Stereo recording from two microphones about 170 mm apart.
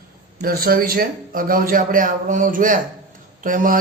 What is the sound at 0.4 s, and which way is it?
A man's voice, 60° right (ahead or behind).